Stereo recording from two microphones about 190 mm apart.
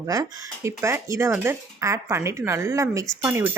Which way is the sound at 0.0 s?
20° right (ahead or behind).